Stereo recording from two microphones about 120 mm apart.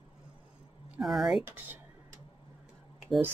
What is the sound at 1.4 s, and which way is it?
Speech, 15° right (ahead or behind).